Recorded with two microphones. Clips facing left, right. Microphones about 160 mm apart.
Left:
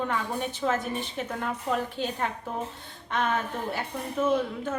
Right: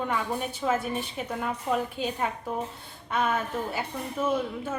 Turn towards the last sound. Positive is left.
turn(degrees=-10)  # may be behind; listen again after turning